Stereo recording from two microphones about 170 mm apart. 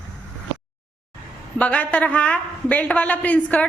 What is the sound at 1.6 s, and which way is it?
A woman's voice, 10° left (ahead or behind).